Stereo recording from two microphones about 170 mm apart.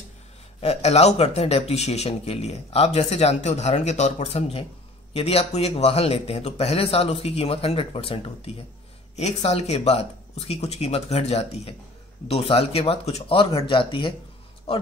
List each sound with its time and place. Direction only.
0.6 s speech: 40° left (ahead or behind)